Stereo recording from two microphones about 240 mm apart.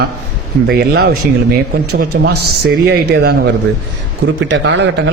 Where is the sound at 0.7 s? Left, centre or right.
Right.